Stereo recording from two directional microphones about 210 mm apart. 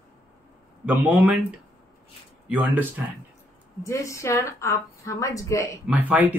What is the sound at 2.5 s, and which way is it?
Speech, 10° right (ahead or behind).